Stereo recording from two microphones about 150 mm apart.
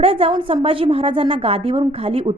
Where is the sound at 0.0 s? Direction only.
40° right (ahead or behind).